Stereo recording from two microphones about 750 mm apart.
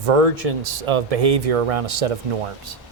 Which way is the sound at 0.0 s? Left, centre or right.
Right.